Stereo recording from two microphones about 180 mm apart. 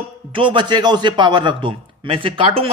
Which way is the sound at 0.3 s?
30° right (ahead or behind).